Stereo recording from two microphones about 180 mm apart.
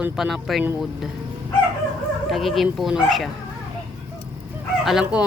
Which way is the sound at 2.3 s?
Centre (ahead or behind).